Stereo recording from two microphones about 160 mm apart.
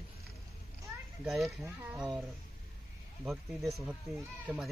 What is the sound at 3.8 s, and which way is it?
Speech, 15° right (ahead or behind).